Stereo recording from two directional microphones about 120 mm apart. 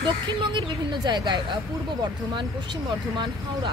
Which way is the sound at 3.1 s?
40° right (ahead or behind).